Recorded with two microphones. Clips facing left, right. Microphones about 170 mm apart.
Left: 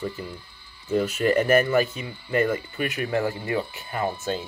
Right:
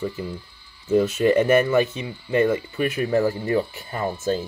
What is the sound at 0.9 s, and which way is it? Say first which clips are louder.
Speech: right 4 dB; 25° right (ahead or behind).